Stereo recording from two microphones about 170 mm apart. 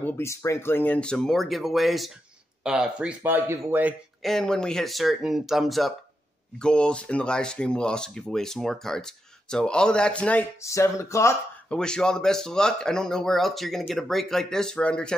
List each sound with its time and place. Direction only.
0.0 s speech: 15° left (ahead or behind); by 3.9 s 10° right (ahead or behind)
4.2 s speech: centre (ahead or behind)
10.6 s speech: 20° left (ahead or behind)
11.7 s speech: 5° left (ahead or behind)